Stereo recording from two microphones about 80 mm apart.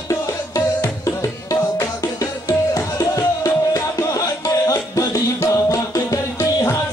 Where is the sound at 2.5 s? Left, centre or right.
Left.